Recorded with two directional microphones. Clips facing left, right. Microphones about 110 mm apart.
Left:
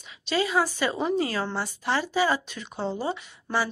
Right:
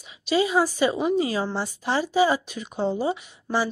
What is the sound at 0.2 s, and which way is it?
A woman's voice, 15° right (ahead or behind).